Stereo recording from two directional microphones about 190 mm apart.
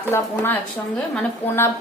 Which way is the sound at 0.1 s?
15° left (ahead or behind).